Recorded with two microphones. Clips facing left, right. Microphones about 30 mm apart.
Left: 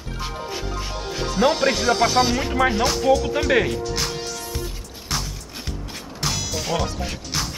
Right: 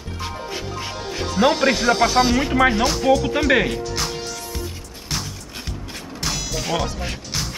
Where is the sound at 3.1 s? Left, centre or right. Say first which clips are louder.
Right 1 dB; centre.